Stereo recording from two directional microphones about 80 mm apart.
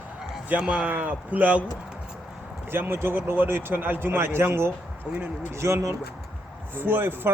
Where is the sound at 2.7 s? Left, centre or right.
Right.